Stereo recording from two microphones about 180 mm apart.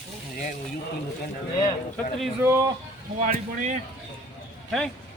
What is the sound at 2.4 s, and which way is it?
Speech, 15° right (ahead or behind).